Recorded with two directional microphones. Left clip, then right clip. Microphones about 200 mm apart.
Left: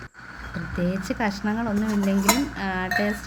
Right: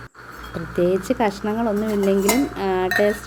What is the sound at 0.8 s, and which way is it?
Speech, 20° right (ahead or behind).